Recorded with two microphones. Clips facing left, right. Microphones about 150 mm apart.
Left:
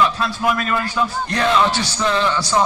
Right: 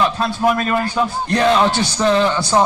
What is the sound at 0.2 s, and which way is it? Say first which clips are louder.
A man's voice: right 3 dB; 40° right (ahead or behind).